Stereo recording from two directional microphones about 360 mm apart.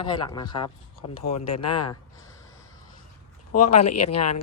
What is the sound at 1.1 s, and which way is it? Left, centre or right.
Speech, left.